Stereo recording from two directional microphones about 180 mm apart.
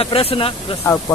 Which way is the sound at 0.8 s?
15° left (ahead or behind).